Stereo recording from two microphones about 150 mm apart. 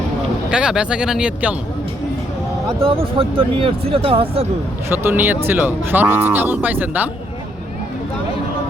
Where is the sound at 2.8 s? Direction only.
40° right (ahead or behind).